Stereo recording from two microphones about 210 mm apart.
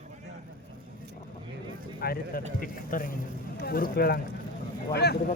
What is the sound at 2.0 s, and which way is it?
Speech, 45° left (ahead or behind).